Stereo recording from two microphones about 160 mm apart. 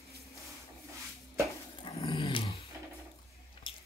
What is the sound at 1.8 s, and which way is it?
Dog, 30° left (ahead or behind).